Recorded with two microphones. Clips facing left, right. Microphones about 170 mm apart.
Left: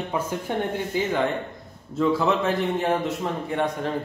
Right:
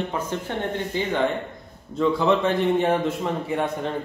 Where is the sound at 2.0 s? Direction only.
5° left (ahead or behind).